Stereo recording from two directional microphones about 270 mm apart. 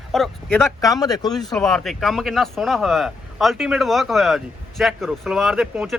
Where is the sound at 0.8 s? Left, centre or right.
Centre.